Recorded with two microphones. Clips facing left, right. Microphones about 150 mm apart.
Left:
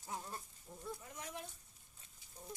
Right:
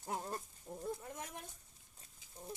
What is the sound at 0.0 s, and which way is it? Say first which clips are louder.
Goat: right 5 dB; 50° right (ahead or behind).